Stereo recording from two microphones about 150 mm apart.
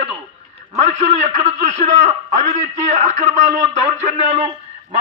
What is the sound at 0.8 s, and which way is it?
A man's voice, 45° right (ahead or behind).